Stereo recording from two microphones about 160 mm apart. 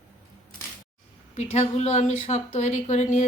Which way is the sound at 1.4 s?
40° left (ahead or behind).